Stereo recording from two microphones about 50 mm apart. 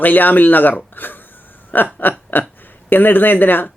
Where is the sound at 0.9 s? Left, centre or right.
Left.